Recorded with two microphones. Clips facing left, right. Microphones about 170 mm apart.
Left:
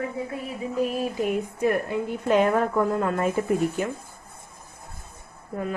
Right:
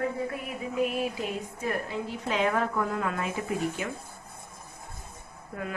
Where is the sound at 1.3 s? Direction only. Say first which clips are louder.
Left 8 dB; 55° left (ahead or behind).